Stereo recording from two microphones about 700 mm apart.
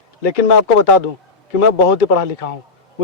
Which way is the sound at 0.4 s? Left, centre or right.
Left.